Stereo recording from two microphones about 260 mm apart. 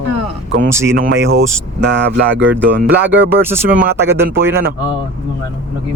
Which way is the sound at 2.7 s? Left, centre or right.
Right.